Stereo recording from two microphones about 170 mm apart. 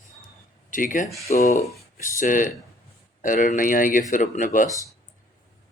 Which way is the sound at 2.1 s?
50° left (ahead or behind).